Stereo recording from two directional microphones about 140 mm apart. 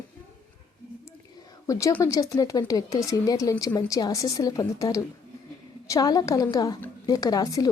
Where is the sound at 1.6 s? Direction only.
25° left (ahead or behind).